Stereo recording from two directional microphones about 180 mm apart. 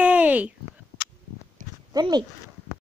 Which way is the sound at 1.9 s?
25° right (ahead or behind).